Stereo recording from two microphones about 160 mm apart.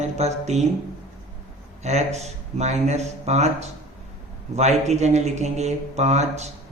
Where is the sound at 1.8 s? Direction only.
45° right (ahead or behind).